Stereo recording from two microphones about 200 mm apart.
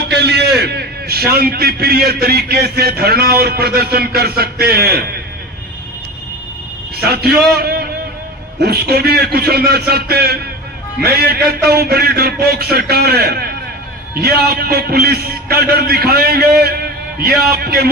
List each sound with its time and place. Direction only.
0.0 s a sound: 55° right (ahead or behind)
2.2 s a man's voice: 50° right (ahead or behind)
7.0 s a man's voice: 50° right (ahead or behind)